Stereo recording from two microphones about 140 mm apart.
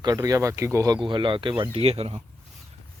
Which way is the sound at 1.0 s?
35° right (ahead or behind).